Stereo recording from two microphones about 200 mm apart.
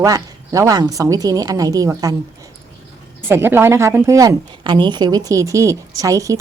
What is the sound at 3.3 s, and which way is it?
A woman's voice, 10° right (ahead or behind).